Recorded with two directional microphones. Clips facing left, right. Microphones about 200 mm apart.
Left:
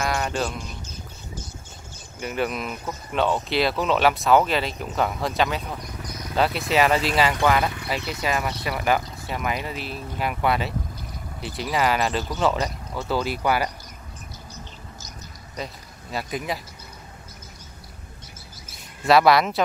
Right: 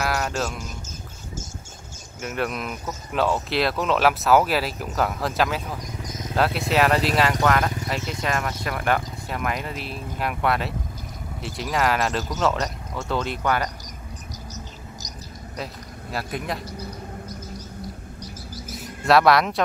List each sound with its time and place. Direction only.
0.0 s music: centre (ahead or behind)
0.8 s boat: 45° right (ahead or behind)
2.1 s speech: centre (ahead or behind)
5.8 s vehicle: 20° right (ahead or behind)
6.3 s speech: centre (ahead or behind)
14.5 s insect: 40° right (ahead or behind)
15.5 s a man's voice: centre (ahead or behind)
19.0 s speech: centre (ahead or behind)